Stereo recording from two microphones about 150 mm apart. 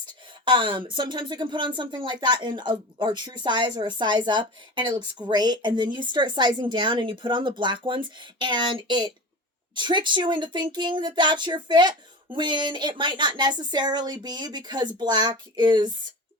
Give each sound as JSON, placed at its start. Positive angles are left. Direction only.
{"t": 0.0, "sound": "speech", "side_deg": -30}